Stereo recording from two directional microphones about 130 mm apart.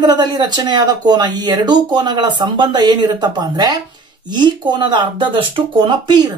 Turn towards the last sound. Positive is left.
turn(degrees=-35)  # may be behind; listen again after turning